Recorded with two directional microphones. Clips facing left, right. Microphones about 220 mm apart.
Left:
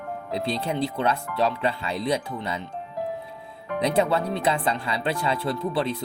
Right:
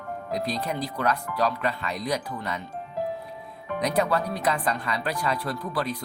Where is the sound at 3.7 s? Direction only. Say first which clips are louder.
Left 2 dB; 25° left (ahead or behind).